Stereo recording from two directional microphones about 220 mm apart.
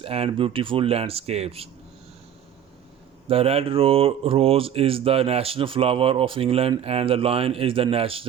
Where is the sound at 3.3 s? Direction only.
25° right (ahead or behind).